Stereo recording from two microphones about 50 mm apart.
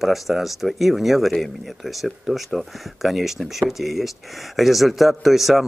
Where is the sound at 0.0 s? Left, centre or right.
Centre.